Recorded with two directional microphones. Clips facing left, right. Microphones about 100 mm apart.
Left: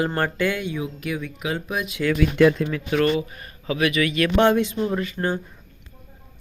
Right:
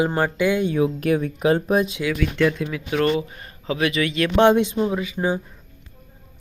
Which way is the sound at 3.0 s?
30° right (ahead or behind).